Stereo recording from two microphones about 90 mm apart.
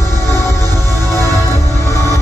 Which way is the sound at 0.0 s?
30° left (ahead or behind).